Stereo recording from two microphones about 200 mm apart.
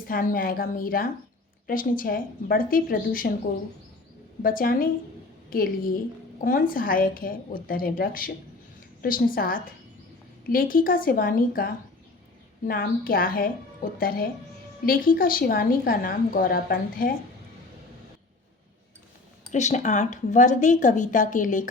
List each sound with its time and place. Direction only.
0.1 s a woman's voice: 45° left (ahead or behind)
4.4 s a woman's voice: 45° left (ahead or behind)
19.5 s speech: 35° left (ahead or behind)